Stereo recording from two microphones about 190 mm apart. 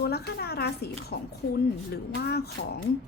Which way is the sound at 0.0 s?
55° left (ahead or behind).